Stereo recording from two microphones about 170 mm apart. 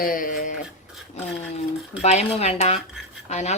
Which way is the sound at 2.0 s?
40° left (ahead or behind).